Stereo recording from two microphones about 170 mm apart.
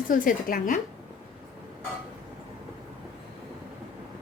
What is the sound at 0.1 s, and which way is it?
Speech, 55° left (ahead or behind).